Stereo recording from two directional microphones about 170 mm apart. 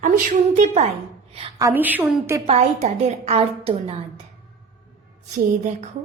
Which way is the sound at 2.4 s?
40° right (ahead or behind).